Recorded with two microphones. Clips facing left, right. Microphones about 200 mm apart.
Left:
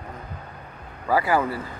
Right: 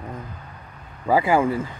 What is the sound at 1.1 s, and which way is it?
Speech, 20° right (ahead or behind).